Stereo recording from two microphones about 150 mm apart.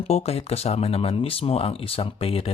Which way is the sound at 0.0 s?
45° left (ahead or behind).